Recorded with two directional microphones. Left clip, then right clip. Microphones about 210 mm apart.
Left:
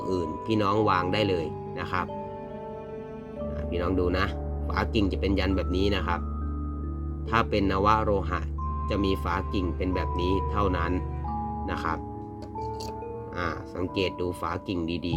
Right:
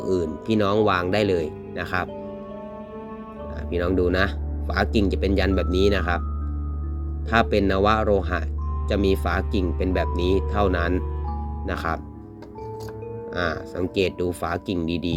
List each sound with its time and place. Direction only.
0.0 s speech: 20° right (ahead or behind)
3.7 s speech: 20° right (ahead or behind)
7.3 s speech: 20° right (ahead or behind)
13.3 s speech: 20° right (ahead or behind)